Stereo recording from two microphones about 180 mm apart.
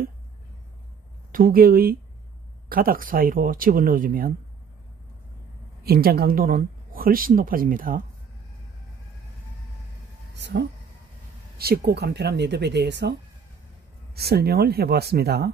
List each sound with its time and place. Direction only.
1.3 s speech: 55° right (ahead or behind)
5.9 s speech: 60° right (ahead or behind)
10.3 s speech: 75° right (ahead or behind)
11.5 s speech: 60° right (ahead or behind)